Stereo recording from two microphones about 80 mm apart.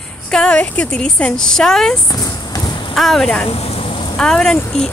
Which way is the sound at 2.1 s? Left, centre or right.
Left.